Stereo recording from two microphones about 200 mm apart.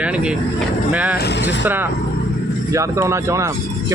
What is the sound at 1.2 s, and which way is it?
Speech, 60° left (ahead or behind).